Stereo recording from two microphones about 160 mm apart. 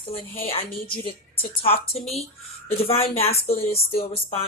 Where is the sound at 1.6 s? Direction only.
40° left (ahead or behind).